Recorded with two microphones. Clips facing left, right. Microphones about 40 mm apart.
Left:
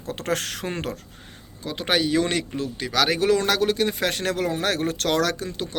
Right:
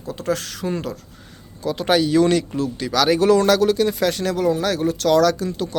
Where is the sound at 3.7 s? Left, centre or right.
Left.